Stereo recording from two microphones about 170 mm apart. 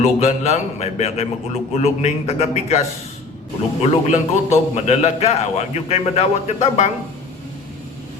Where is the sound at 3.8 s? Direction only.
45° left (ahead or behind).